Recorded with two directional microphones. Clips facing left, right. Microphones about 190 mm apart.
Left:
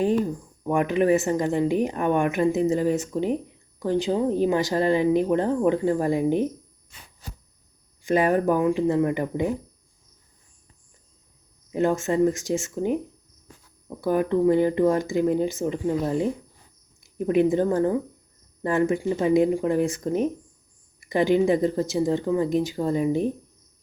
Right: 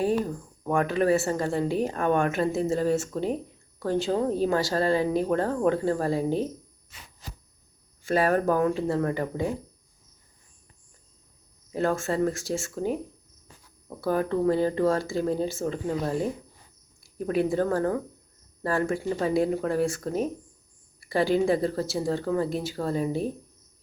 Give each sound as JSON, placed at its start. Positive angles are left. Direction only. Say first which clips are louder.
{"t": 0.6, "sound": "speech", "louder": "left 2 dB", "side_deg": 15}
{"t": 8.0, "sound": "speech", "louder": "left 2 dB", "side_deg": 15}
{"t": 11.7, "sound": "speech", "louder": "left 3 dB", "side_deg": 15}
{"t": 14.0, "sound": "speech", "louder": "left 3 dB", "side_deg": 15}